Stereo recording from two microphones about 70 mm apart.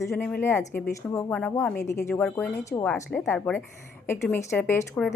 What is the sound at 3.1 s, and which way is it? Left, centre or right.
Speech, left.